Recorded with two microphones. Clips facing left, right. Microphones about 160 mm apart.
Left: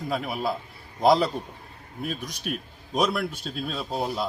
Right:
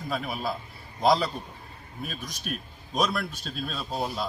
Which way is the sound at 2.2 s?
60° left (ahead or behind).